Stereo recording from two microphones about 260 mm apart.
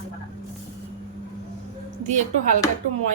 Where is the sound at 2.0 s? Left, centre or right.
Right.